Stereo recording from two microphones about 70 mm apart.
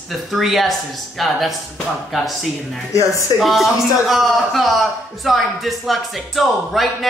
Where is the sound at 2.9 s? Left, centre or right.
Left.